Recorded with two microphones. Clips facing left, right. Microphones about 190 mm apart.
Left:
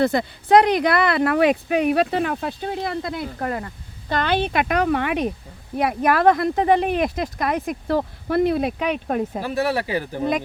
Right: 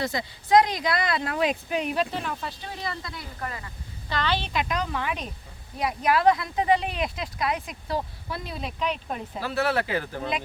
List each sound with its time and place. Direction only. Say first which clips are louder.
0.0 s speech: left 10 dB; 60° left (ahead or behind)
9.4 s speech: left 3 dB; 15° left (ahead or behind)